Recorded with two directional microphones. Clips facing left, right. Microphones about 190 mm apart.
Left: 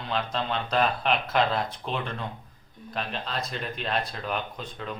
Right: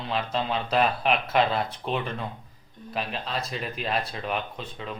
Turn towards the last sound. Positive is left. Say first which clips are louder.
# right 1 dB
turn(degrees=-5)  # may be behind; listen again after turning